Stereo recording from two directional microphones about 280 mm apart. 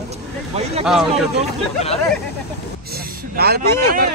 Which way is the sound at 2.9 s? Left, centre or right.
Right.